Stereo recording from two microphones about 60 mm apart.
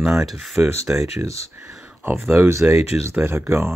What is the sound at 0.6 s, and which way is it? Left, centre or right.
Speech, right.